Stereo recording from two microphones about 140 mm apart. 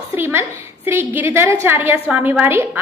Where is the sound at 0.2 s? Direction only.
15° right (ahead or behind).